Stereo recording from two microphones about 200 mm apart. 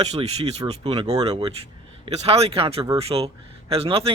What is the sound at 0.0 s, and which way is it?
Speech, 30° right (ahead or behind).